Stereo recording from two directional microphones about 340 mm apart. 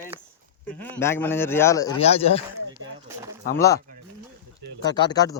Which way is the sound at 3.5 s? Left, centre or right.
Centre.